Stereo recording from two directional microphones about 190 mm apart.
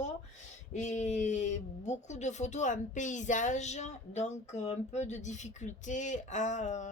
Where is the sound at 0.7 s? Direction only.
40° left (ahead or behind).